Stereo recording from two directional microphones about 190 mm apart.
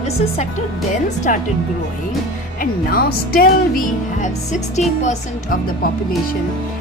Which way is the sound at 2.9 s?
50° left (ahead or behind).